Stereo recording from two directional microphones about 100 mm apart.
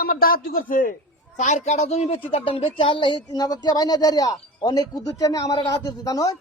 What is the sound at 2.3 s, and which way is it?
Speech, 65° left (ahead or behind).